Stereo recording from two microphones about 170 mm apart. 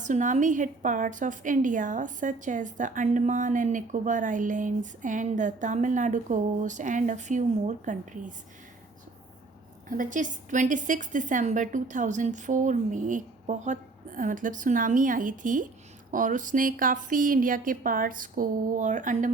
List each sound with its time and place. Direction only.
0.0 s a woman's voice: 45° right (ahead or behind)
9.9 s a woman's voice: 50° right (ahead or behind)